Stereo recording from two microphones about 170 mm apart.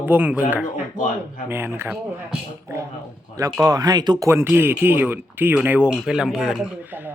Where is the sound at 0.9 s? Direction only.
50° left (ahead or behind).